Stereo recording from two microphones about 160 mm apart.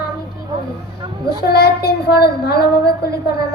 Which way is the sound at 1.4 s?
80° left.